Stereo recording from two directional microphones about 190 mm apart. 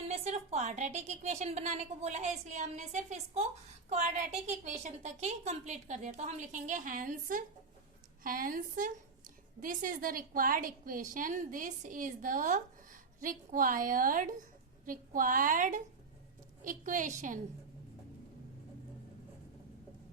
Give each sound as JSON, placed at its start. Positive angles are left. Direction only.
{"t": 0.1, "sound": "a woman's voice", "side_deg": -35}